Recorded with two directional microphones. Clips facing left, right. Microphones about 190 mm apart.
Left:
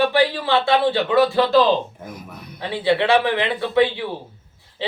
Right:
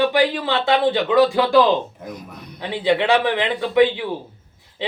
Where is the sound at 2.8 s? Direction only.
15° right (ahead or behind).